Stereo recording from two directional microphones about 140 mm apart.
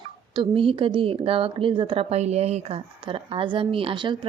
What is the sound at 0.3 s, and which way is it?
Speech, 40° right (ahead or behind).